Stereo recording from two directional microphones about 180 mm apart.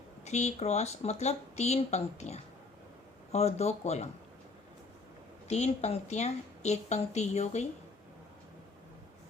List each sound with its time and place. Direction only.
0.3 s a woman's voice: 40° left (ahead or behind)
5.5 s a woman's voice: 35° left (ahead or behind)